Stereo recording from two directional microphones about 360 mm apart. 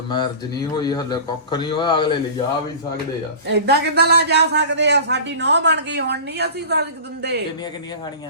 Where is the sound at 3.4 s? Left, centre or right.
Right.